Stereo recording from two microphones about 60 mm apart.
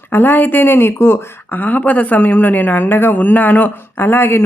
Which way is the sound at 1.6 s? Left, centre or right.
Left.